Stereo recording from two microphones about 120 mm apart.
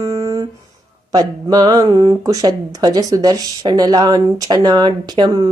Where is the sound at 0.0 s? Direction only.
25° right (ahead or behind).